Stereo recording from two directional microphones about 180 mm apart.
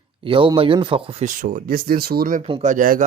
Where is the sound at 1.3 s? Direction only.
50° right (ahead or behind).